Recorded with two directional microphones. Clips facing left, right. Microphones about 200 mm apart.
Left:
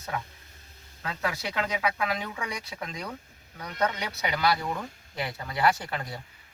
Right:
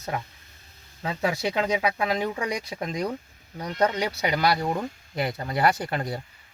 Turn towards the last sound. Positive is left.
turn(degrees=-40)  # may be behind; listen again after turning